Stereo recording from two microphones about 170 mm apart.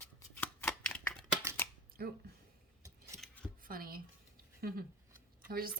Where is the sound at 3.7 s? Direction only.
55° right (ahead or behind).